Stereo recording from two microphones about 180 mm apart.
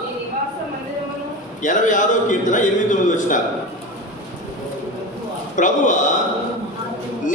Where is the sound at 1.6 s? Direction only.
45° left (ahead or behind).